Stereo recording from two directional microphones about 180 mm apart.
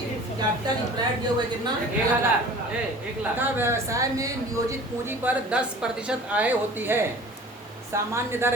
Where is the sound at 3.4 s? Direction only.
10° right (ahead or behind).